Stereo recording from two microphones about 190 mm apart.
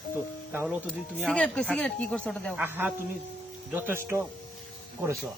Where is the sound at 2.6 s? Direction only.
10° right (ahead or behind).